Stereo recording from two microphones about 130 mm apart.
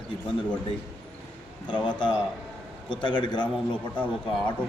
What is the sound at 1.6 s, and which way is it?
A man's voice, 40° left (ahead or behind).